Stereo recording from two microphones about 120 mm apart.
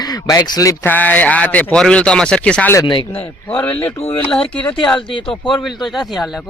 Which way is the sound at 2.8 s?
45° left (ahead or behind).